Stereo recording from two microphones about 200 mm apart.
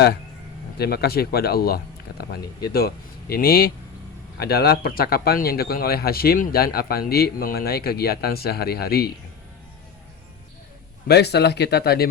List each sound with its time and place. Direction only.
0.8 s speech: 50° left (ahead or behind)
11.1 s speech: 55° left (ahead or behind)